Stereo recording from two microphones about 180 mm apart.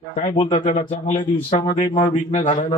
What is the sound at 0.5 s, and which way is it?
Speech, 45° left (ahead or behind).